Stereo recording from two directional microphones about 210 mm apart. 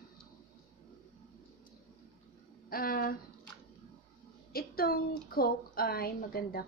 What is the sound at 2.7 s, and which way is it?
Speech, 45° left (ahead or behind).